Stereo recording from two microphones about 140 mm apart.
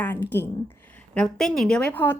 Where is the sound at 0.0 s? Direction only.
15° left (ahead or behind).